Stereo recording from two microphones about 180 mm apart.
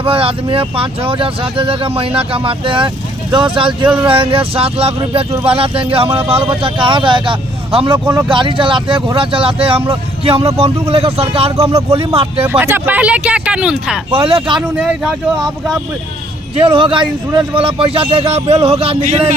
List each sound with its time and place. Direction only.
0.0 s a man's voice: 30° right (ahead or behind)
7.9 s speech: 10° right (ahead or behind)
8.3 s a man's voice: 25° right (ahead or behind)
12.5 s speech: 10° right (ahead or behind)
14.1 s speech: 30° right (ahead or behind)
14.8 s speech: 5° right (ahead or behind)
16.6 s speech: 30° right (ahead or behind)